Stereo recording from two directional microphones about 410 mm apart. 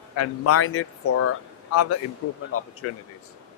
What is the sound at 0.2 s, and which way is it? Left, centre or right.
Speech, left.